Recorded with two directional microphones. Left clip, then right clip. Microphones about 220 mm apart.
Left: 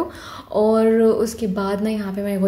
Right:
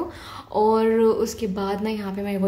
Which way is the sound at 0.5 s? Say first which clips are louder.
Left 3 dB; 10° left (ahead or behind).